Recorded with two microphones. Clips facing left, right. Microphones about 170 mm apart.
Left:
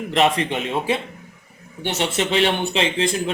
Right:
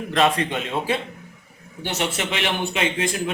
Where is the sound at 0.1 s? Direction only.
20° left (ahead or behind).